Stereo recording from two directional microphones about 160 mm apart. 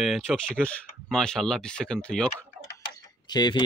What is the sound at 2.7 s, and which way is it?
Tick-tock, 25° left (ahead or behind).